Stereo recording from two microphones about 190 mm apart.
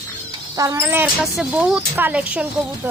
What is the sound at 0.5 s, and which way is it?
Speech, 15° right (ahead or behind).